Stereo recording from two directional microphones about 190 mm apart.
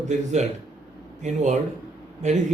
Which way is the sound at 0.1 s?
40° right (ahead or behind).